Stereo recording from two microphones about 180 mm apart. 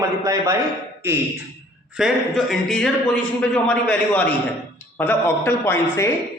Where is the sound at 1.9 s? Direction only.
Centre (ahead or behind).